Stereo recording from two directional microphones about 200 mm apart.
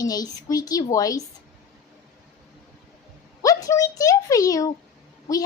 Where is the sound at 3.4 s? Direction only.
15° left (ahead or behind).